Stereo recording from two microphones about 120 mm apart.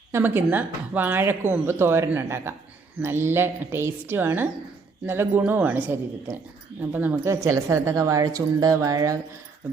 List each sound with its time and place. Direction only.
0.1 s speech: 15° right (ahead or behind)